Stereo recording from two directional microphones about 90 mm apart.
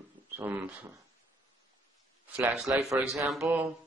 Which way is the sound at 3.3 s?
5° right (ahead or behind).